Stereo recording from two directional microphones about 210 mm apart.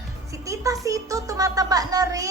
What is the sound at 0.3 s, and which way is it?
Music, 15° right (ahead or behind).